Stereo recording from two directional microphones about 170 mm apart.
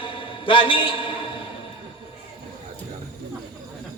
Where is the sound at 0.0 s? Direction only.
30° left (ahead or behind).